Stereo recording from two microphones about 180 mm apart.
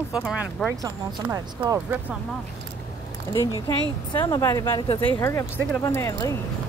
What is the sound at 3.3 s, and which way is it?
Speech, 15° left (ahead or behind).